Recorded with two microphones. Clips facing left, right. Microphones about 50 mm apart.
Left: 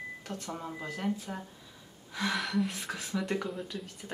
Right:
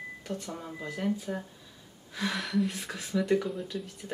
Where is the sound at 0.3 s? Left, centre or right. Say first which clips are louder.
Right 2 dB; centre.